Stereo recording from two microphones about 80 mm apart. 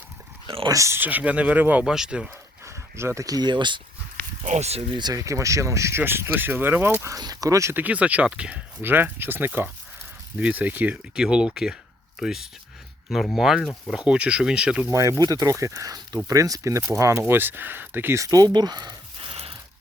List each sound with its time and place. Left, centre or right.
0.7 s speech: right
0.9 s speech: right
1.8 s speech: centre
2.6 s a sound: right
3.2 s speech: right
5.1 s speech: right
6.0 s speech: right
7.2 s speech: right
7.7 s speech: right
8.8 s speech: right
11.1 s speech: centre
14.8 s speech: right
18.2 s speech: right